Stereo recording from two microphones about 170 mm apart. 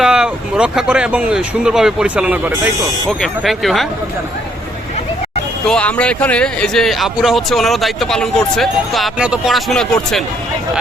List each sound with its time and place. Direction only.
0.0 s speech: 5° right (ahead or behind)
5.6 s speech: 5° left (ahead or behind)